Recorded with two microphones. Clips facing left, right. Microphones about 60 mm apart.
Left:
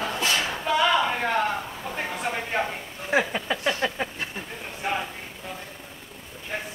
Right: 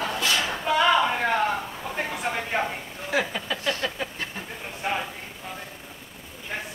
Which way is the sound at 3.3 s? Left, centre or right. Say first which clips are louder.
Left 2 dB; left.